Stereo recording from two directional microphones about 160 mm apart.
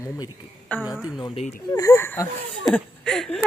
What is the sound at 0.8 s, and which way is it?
Speech, 5° right (ahead or behind).